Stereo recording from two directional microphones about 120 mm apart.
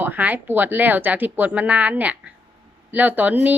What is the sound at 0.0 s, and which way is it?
A woman's voice, 15° right (ahead or behind).